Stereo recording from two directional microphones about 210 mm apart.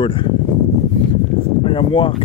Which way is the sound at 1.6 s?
25° left (ahead or behind).